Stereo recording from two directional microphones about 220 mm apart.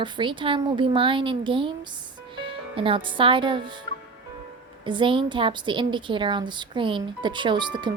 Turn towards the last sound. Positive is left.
turn(degrees=-20)  # may be behind; listen again after turning